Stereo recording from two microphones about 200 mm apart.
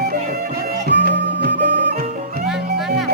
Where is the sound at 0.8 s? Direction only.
50° right (ahead or behind).